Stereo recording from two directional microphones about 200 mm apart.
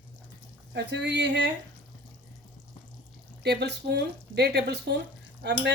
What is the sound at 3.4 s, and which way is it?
Speech, 55° right (ahead or behind).